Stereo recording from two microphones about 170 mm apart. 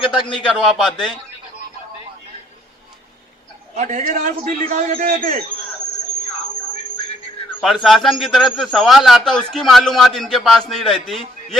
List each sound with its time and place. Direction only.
0.0 s a man's voice: 30° left (ahead or behind)
0.4 s a man's voice: centre (ahead or behind)
3.8 s a man's voice: 45° right (ahead or behind)
7.6 s a man's voice: centre (ahead or behind)